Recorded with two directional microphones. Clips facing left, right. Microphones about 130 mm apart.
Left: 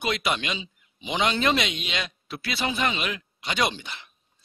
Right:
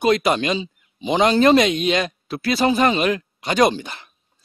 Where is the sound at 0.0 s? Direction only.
40° right (ahead or behind).